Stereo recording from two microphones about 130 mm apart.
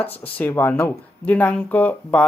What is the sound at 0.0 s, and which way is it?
Speech, 15° left (ahead or behind).